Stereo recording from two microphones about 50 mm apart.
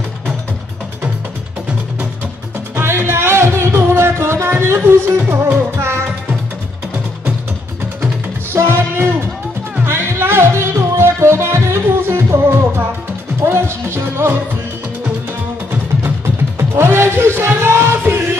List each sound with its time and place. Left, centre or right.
2.7 s music: right
8.6 s music: right
16.5 s music: right
18.0 s music: right